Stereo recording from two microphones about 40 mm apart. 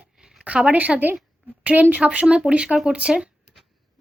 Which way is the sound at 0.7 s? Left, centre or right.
Right.